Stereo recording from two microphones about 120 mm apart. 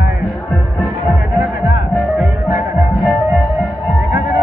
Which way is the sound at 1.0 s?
25° right (ahead or behind).